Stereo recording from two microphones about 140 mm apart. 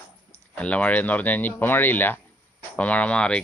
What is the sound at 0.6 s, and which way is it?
Speech, 10° left (ahead or behind).